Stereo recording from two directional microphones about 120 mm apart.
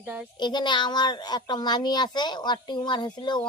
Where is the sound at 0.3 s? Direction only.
40° left (ahead or behind).